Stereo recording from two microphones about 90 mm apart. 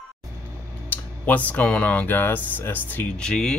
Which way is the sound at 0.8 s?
20° left (ahead or behind).